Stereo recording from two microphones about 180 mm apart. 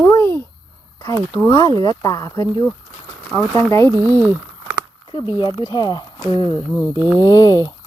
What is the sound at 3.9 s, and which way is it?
Speech, 15° right (ahead or behind).